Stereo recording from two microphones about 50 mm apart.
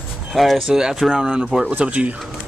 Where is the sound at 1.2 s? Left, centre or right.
Centre.